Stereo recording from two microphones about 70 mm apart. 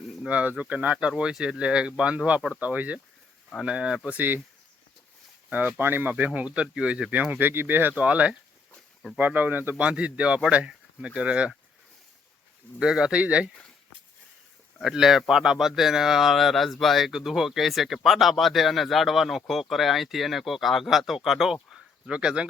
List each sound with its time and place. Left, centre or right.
0.3 s speech: centre
5.5 s speech: right
9.7 s speech: centre
12.8 s speech: centre
14.8 s speech: centre